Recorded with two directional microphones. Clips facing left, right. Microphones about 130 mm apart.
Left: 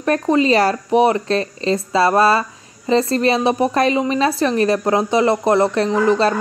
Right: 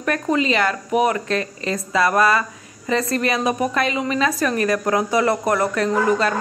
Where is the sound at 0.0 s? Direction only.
30° left (ahead or behind).